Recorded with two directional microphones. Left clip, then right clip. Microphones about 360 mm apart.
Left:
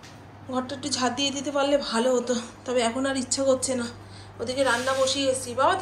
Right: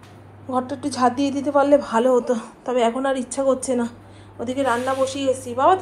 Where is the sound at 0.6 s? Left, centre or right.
Right.